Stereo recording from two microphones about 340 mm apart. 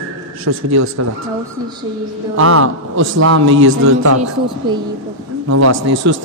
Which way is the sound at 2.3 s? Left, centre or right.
Right.